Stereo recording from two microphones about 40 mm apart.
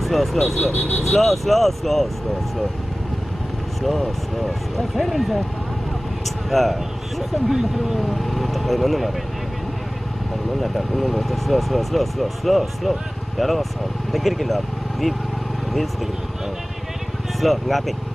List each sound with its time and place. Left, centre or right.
0.0 s speech: centre
0.7 s speech: left
1.0 s speech: centre
4.4 s speech: centre
10.6 s speech: centre
17.4 s speech: centre